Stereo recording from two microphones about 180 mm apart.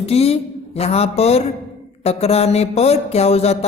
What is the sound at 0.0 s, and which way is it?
Speech, 35° left (ahead or behind).